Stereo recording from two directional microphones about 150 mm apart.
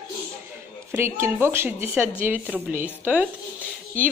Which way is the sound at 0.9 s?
15° right (ahead or behind).